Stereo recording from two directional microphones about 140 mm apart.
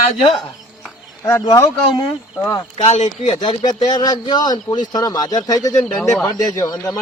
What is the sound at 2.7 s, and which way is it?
Speech, 55° left (ahead or behind).